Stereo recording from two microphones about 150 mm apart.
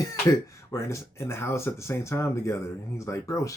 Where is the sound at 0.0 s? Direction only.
20° left (ahead or behind).